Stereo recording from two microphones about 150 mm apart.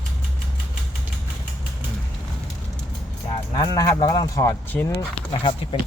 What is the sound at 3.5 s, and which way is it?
Speech, 25° left (ahead or behind).